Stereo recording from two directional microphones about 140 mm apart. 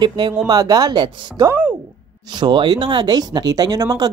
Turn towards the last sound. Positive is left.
turn(degrees=-25)  # may be behind; listen again after turning